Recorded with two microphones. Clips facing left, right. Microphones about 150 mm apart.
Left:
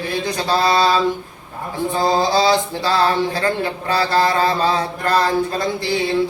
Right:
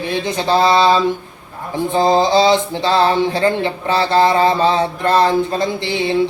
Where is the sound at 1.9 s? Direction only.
20° right (ahead or behind).